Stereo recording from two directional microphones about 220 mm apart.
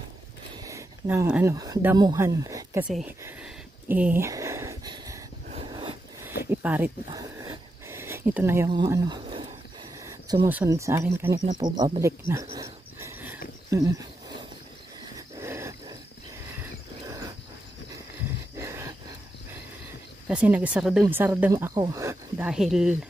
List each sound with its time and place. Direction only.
0.6 s speech: 15° right (ahead or behind)
2.9 s a sound: 5° right (ahead or behind); by 5.9 s 25° right (ahead or behind)
6.5 s speech: 5° right (ahead or behind)
7.1 s a sound: 15° right (ahead or behind)
10.0 s speech: 15° right (ahead or behind)
12.5 s wheeze: 15° right (ahead or behind)
13.7 s speech: 15° right (ahead or behind)
15.1 s wild animals: 10° right (ahead or behind)
18.6 s a sound: 10° right (ahead or behind)
20.2 s speech: 5° right (ahead or behind)
22.5 s speech: centre (ahead or behind)